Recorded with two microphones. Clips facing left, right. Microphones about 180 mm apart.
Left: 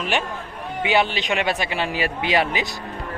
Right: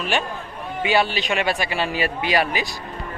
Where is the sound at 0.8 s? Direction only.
20° left (ahead or behind).